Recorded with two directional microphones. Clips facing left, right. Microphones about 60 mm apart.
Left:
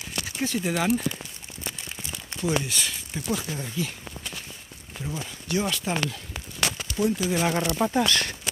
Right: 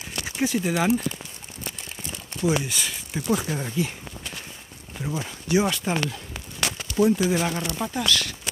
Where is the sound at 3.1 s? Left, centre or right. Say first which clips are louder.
Right 5 dB; right.